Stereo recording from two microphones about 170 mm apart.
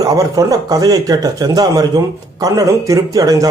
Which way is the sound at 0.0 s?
20° right (ahead or behind).